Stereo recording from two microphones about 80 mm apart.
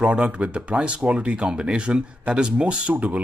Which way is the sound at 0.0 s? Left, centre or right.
Centre.